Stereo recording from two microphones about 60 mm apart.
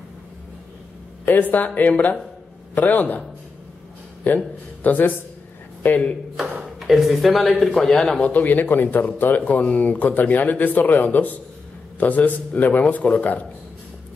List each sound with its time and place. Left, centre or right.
1.2 s speech: left
4.2 s speech: left
6.9 s speech: centre
8.2 s speech: left